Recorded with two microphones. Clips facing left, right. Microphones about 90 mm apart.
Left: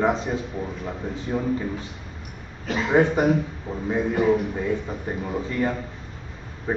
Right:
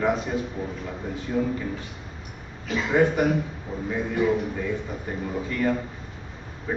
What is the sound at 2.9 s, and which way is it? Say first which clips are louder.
Speech: left 2 dB; 25° left (ahead or behind).